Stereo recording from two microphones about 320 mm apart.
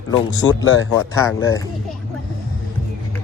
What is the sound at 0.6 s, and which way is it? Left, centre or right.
Speech, left.